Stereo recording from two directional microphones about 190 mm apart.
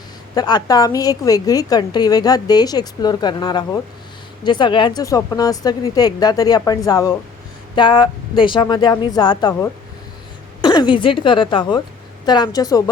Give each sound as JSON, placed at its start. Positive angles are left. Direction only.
{"t": 0.3, "sound": "a woman's voice", "side_deg": 20}